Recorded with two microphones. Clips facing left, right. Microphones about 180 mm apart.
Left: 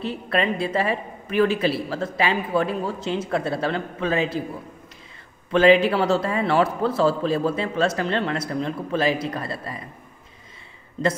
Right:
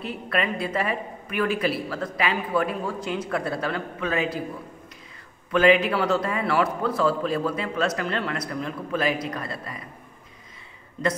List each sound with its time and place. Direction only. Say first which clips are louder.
0.0 s a woman's voice: left 3 dB; 30° left (ahead or behind)
5.5 s a woman's voice: left 3 dB; 30° left (ahead or behind)